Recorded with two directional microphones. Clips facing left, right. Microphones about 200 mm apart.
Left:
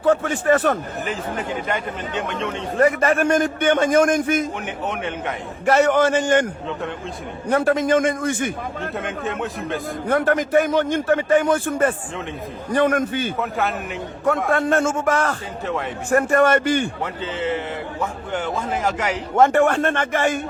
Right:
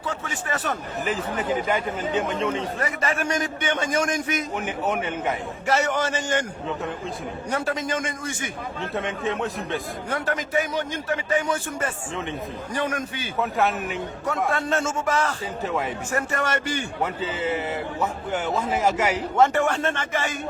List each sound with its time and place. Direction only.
0.0 s a man's voice: 55° left (ahead or behind)
1.6 s speech: centre (ahead or behind)
2.7 s a man's voice: 50° left (ahead or behind)
4.6 s speech: 5° right (ahead or behind)
5.6 s a man's voice: 55° left (ahead or behind)
7.5 s a man's voice: 55° left (ahead or behind)
8.8 s speech: centre (ahead or behind)
10.1 s a man's voice: 55° left (ahead or behind)
13.4 s speech: centre (ahead or behind)
14.5 s a man's voice: 50° left (ahead or behind)
17.0 s a man's voice: 10° right (ahead or behind)
19.4 s a man's voice: 55° left (ahead or behind)